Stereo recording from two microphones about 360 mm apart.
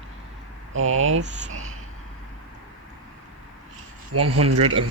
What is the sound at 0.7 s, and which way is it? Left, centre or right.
Speech, right.